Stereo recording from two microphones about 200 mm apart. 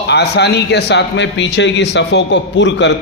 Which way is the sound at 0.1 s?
55° left (ahead or behind).